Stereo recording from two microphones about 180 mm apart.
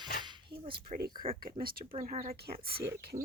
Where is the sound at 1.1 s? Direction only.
25° right (ahead or behind).